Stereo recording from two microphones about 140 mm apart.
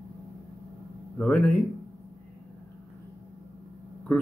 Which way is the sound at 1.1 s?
10° left (ahead or behind).